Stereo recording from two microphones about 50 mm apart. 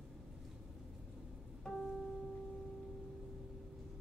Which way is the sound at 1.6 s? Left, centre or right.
Centre.